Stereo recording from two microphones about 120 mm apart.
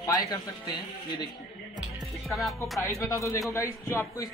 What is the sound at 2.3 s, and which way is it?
Speech, centre (ahead or behind).